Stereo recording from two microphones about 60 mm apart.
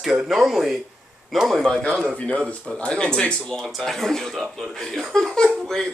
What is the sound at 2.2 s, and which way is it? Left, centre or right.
A man's voice, centre.